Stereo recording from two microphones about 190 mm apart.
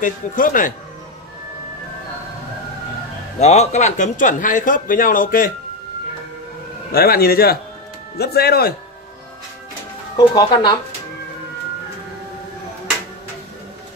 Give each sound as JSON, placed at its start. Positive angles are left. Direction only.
{"t": 0.0, "sound": "speech", "side_deg": 45}
{"t": 3.3, "sound": "speech", "side_deg": 35}
{"t": 6.9, "sound": "speech", "side_deg": 55}
{"t": 10.1, "sound": "speech", "side_deg": 20}